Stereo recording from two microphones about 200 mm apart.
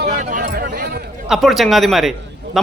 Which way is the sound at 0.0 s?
40° right (ahead or behind).